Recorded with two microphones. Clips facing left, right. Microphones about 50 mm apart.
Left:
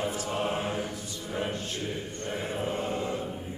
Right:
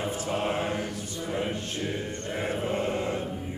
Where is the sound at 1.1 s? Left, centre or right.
Right.